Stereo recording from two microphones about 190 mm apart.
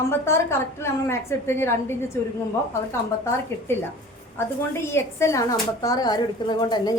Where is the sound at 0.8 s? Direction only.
15° left (ahead or behind).